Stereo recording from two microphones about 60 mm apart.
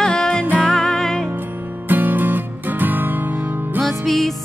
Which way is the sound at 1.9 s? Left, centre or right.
Right.